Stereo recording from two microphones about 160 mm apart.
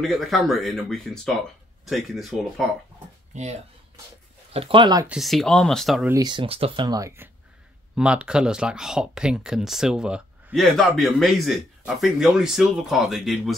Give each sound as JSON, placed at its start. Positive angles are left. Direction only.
{"t": 0.0, "sound": "speech", "side_deg": 0}
{"t": 4.5, "sound": "speech", "side_deg": -35}
{"t": 5.0, "sound": "speech", "side_deg": -5}
{"t": 6.0, "sound": "speech", "side_deg": -25}
{"t": 7.9, "sound": "speech", "side_deg": -5}